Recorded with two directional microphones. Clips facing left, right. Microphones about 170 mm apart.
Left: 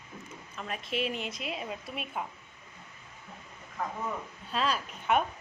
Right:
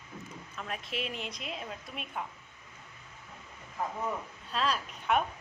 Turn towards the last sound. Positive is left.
turn(degrees=0)  # may be behind; listen again after turning